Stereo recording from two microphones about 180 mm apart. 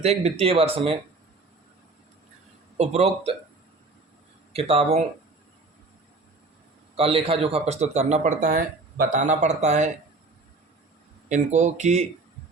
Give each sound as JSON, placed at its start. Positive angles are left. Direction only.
{"t": 0.0, "sound": "speech", "side_deg": -35}
{"t": 2.7, "sound": "speech", "side_deg": -35}
{"t": 4.5, "sound": "speech", "side_deg": -35}
{"t": 6.9, "sound": "speech", "side_deg": -30}
{"t": 11.3, "sound": "speech", "side_deg": -40}